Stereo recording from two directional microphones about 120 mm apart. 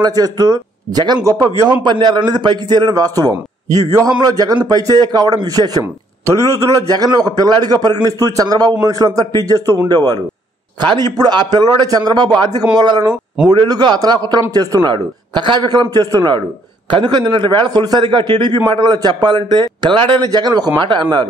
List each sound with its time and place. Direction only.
0.0 s speech: 30° right (ahead or behind)
6.9 s speech: 30° right (ahead or behind)